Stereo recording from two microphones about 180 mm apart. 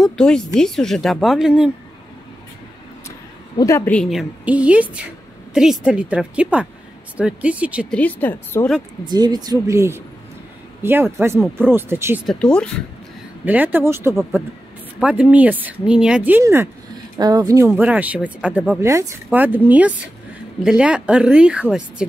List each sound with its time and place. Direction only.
0.0 s a woman's voice: 5° left (ahead or behind)
3.5 s a woman's voice: 15° left (ahead or behind); by 7.9 s 10° right (ahead or behind)
7.9 s speech: 10° left (ahead or behind)
9.0 s a woman's voice: 25° right (ahead or behind)
12.3 s a woman's voice: 5° left (ahead or behind)
13.5 s a woman's voice: 10° right (ahead or behind)